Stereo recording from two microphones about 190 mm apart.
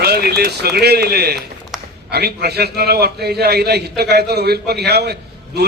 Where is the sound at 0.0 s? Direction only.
55° right (ahead or behind).